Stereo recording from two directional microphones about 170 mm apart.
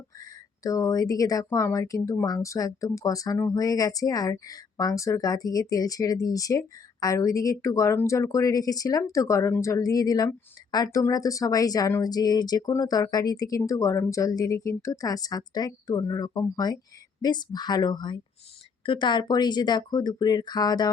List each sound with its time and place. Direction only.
0.2 s speech: 20° left (ahead or behind)